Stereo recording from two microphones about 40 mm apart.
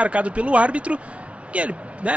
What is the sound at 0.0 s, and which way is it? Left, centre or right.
Speech, right.